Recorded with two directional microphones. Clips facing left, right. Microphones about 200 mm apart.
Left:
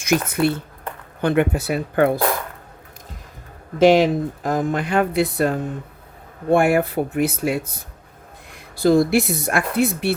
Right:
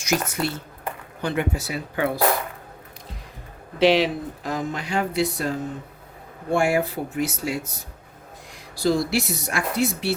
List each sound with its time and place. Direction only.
0.0 s speech: 55° left (ahead or behind)
3.8 s speech: 45° left (ahead or behind)
8.7 s speech: 55° left (ahead or behind)